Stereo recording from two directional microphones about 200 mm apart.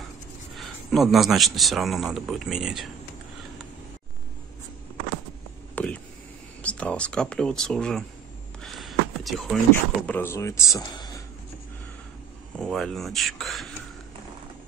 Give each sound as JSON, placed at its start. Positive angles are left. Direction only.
{"t": 0.6, "sound": "speech", "side_deg": 0}
{"t": 5.8, "sound": "a sound", "side_deg": 5}
{"t": 6.6, "sound": "speech", "side_deg": 5}
{"t": 8.6, "sound": "a sound", "side_deg": 0}
{"t": 10.0, "sound": "speech", "side_deg": 10}
{"t": 12.5, "sound": "speech", "side_deg": 0}